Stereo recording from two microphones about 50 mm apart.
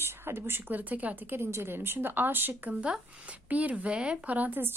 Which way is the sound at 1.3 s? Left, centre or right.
Right.